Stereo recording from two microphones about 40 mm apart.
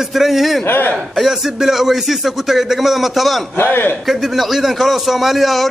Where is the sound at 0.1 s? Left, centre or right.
Centre.